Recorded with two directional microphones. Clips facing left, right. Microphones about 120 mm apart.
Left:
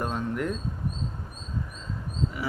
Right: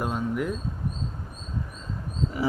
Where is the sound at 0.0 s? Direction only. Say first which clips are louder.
Right 1 dB; 10° right (ahead or behind).